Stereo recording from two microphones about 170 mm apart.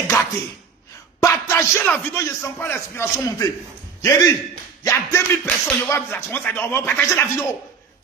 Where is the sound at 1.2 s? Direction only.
15° left (ahead or behind).